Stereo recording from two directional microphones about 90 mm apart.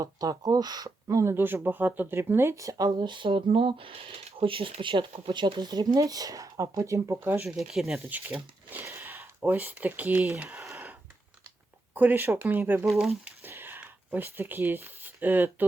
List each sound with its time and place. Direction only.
0.0 s speech: 45° right (ahead or behind)
1.0 s speech: 35° right (ahead or behind)
7.4 s speech: 5° right (ahead or behind)
8.1 s speech: 20° right (ahead or behind)
8.8 s speech: 30° right (ahead or behind)
11.9 s speech: 20° right (ahead or behind)
12.8 s speech: centre (ahead or behind)
13.5 s a sound: 25° right (ahead or behind)